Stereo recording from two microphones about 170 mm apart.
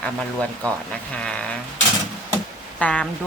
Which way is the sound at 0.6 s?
10° left (ahead or behind).